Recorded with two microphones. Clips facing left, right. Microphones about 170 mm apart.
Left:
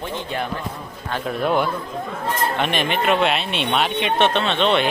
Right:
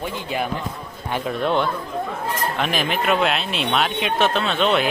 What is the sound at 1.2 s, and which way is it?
A man's voice, 5° left (ahead or behind).